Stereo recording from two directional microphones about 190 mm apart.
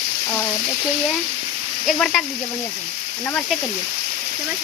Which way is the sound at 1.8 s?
Centre (ahead or behind).